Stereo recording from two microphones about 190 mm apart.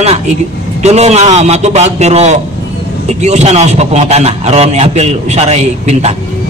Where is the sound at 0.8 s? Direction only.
35° right (ahead or behind).